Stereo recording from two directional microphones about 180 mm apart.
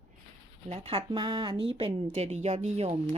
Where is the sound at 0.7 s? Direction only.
30° right (ahead or behind).